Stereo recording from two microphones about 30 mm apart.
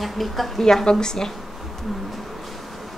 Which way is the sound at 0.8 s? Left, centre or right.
Left.